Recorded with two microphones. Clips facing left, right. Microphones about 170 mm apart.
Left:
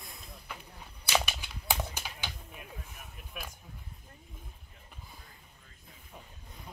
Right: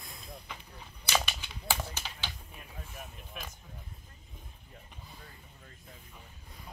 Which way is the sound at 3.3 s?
5° left (ahead or behind).